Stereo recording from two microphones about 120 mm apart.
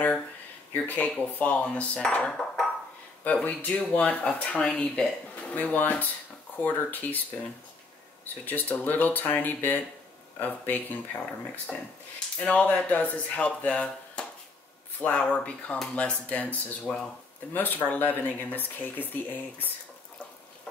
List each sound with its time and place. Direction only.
0.7 s speech: 10° left (ahead or behind)
8.5 s speech: 15° left (ahead or behind)